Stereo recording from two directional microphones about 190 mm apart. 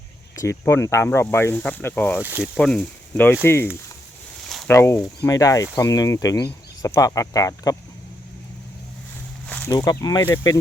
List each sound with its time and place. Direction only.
0.3 s speech: 15° left (ahead or behind)
2.2 s speech: 10° right (ahead or behind)
2.6 s speech: 5° left (ahead or behind)
4.4 s a sound: centre (ahead or behind)
4.7 s speech: 15° left (ahead or behind)
9.5 s a sound: 10° left (ahead or behind)
9.7 s speech: 20° left (ahead or behind)